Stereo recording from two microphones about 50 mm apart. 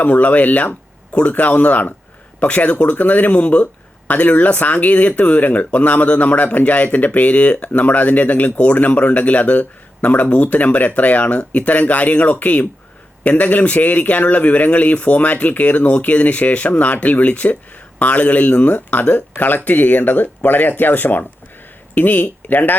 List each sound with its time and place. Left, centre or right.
0.0 s speech: left